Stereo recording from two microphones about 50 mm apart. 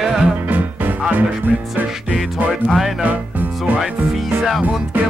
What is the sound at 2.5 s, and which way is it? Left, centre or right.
Music, centre.